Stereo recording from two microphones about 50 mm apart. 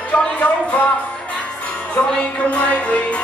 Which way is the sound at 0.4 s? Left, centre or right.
Left.